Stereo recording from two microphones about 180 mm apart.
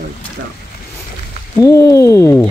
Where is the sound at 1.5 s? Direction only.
20° left (ahead or behind).